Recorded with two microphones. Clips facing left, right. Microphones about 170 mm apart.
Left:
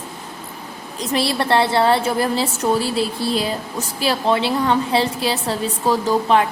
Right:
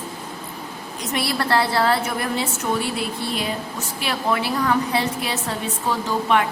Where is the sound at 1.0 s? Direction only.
30° left (ahead or behind).